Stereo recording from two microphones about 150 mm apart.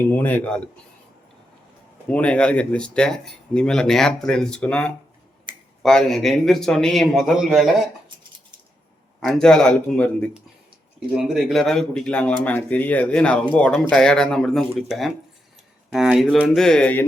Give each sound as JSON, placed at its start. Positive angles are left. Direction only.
{"t": 0.0, "sound": "speech", "side_deg": 10}
{"t": 2.0, "sound": "speech", "side_deg": 10}
{"t": 5.5, "sound": "finger snapping", "side_deg": -30}
{"t": 5.8, "sound": "a man's voice", "side_deg": 0}
{"t": 9.2, "sound": "a man's voice", "side_deg": 5}
{"t": 11.1, "sound": "a man's voice", "side_deg": -5}
{"t": 16.2, "sound": "speech", "side_deg": 10}